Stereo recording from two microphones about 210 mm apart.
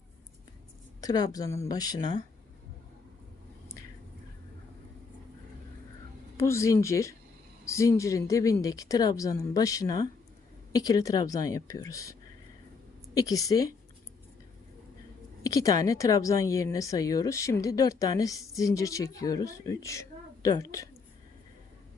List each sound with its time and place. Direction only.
1.0 s a woman's voice: 20° left (ahead or behind)
6.3 s a woman's voice: 15° left (ahead or behind)
13.1 s a woman's voice: 15° left (ahead or behind)
15.4 s a woman's voice: 15° left (ahead or behind)